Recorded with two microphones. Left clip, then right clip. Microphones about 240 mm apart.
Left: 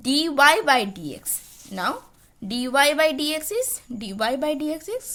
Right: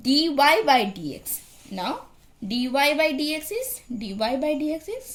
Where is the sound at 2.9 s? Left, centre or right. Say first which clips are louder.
Left 2 dB; left.